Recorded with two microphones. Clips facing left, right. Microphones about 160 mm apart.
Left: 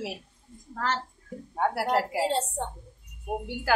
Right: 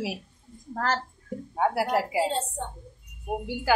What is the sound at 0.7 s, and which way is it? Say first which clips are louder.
Speech: right 2 dB; 50° right (ahead or behind).